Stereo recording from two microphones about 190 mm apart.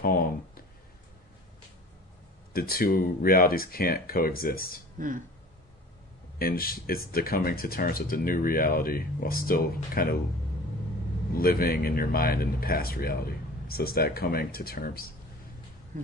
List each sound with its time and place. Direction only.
0.0 s a sound: 50° left (ahead or behind)
2.5 s speech: 50° left (ahead or behind)
4.9 s speech: 45° right (ahead or behind)
6.4 s speech: 50° left (ahead or behind)
11.3 s speech: 50° left (ahead or behind)